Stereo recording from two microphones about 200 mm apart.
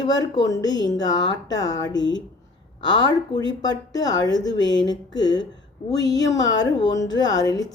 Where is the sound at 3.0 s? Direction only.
20° left (ahead or behind).